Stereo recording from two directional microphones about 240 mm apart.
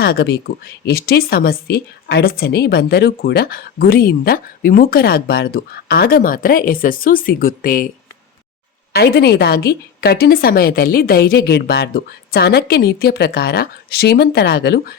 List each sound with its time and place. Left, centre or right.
0.0 s speech: left
8.9 s speech: left